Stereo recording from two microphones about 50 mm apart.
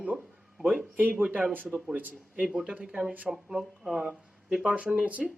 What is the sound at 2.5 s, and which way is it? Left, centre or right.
Speech, centre.